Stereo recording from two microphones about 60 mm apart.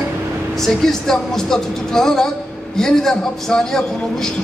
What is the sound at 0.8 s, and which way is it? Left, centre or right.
Speech, centre.